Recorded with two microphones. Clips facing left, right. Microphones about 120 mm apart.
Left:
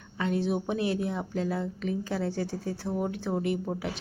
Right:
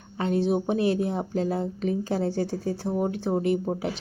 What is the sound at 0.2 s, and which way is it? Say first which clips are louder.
A woman's voice: right 4 dB; 30° right (ahead or behind).